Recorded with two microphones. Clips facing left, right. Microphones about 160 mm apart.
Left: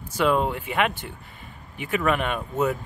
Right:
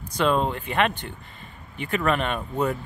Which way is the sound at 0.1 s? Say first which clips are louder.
Even; 10° left (ahead or behind).